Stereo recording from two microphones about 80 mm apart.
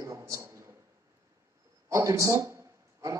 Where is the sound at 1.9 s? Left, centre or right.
Right.